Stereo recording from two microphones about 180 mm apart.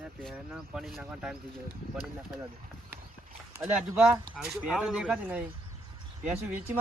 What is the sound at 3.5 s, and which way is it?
Speech, 5° right (ahead or behind).